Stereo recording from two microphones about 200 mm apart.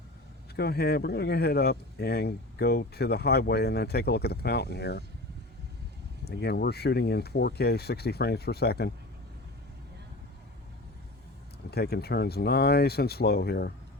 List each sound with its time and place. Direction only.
0.5 s speech: 50° left (ahead or behind)
6.2 s speech: 55° left (ahead or behind)
11.7 s speech: 55° left (ahead or behind)